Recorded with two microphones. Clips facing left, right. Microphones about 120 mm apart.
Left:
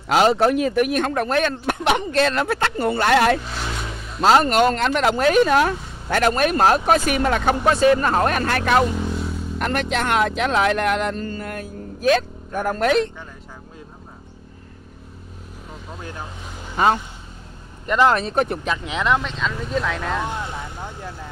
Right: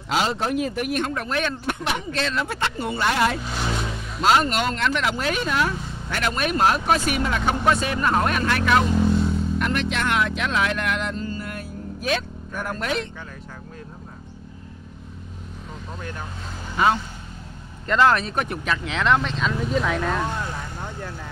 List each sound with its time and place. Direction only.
0.1 s speech: 55° left (ahead or behind)
1.9 s speech: 60° left (ahead or behind)
3.4 s speech: 5° right (ahead or behind)
4.2 s speech: 40° left (ahead or behind)
7.7 s speech: 35° left (ahead or behind)
9.1 s vehicle: 5° left (ahead or behind)
9.6 s speech: 45° left (ahead or behind)
17.8 s speech: 15° left (ahead or behind)
18.1 s speech: 30° left (ahead or behind)
18.7 s speech: 15° left (ahead or behind); by 20.2 s centre (ahead or behind)
20.2 s speech: 20° left (ahead or behind)